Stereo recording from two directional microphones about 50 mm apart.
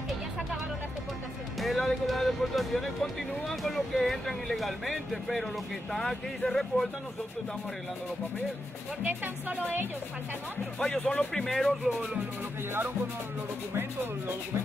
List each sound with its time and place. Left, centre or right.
1.6 s music: centre
2.0 s speech: centre
9.0 s speech: right
10.8 s speech: left
11.3 s speech: centre
11.8 s speech: centre